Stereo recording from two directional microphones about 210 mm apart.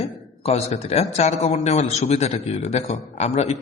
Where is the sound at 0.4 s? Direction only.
30° left (ahead or behind).